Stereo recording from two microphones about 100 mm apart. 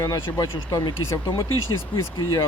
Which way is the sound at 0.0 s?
40° left (ahead or behind).